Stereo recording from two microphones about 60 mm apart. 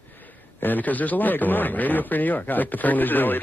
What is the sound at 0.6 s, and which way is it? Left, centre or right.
A man's voice, left.